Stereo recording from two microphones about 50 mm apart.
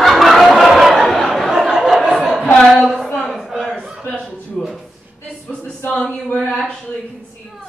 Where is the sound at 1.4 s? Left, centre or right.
Centre.